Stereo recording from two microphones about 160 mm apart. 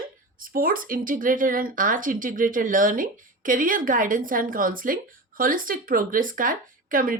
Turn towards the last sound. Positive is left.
turn(degrees=-60)  # may be behind; listen again after turning